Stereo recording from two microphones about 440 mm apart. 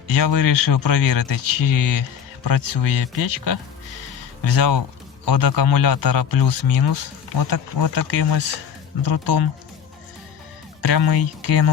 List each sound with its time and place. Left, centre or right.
0.1 s speech: left
10.8 s speech: left